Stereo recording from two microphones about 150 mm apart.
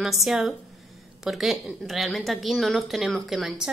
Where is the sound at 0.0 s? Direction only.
Centre (ahead or behind).